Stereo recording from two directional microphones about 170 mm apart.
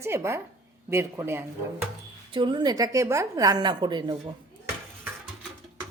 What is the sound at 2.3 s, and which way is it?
A woman's voice, 25° right (ahead or behind).